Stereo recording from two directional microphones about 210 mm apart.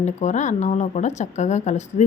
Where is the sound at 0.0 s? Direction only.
35° left (ahead or behind).